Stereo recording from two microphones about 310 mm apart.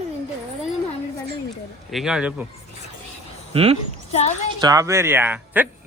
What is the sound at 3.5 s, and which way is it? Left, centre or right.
Speech, centre.